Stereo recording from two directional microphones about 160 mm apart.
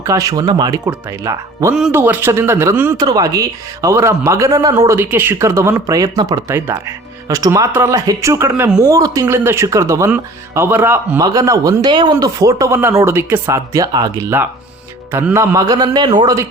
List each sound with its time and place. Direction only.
0.0 s a man's voice: 20° right (ahead or behind)